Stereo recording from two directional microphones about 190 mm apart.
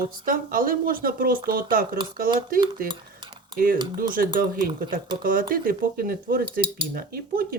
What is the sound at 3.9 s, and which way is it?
Speech, 50° right (ahead or behind).